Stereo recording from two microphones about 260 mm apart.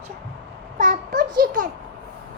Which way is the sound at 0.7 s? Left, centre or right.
Right.